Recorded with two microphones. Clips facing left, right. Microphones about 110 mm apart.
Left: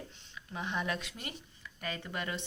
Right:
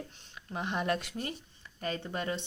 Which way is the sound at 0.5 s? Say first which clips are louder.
Right 4 dB; 45° right (ahead or behind).